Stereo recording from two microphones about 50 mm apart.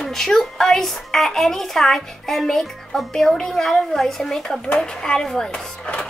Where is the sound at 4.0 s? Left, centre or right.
Centre.